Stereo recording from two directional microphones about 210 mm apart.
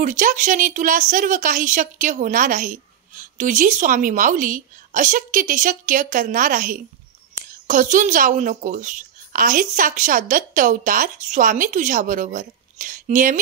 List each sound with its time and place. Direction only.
0.0 s speech: 35° right (ahead or behind)